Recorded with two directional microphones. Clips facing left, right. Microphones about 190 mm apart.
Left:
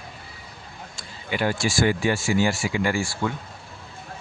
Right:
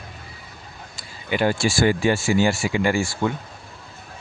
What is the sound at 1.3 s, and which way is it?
Speech, 30° right (ahead or behind).